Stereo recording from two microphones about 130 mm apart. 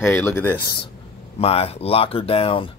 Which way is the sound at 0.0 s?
20° left (ahead or behind).